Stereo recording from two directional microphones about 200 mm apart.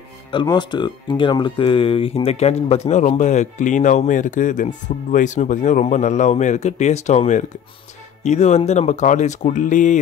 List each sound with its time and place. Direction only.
0.3 s speech: 25° left (ahead or behind); by 9.9 s 40° left (ahead or behind)